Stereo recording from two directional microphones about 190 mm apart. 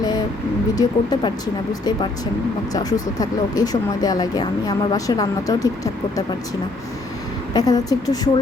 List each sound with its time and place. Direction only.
0.8 s speech: 20° left (ahead or behind)
2.7 s speech: 20° left (ahead or behind)
7.5 s speech: 20° left (ahead or behind)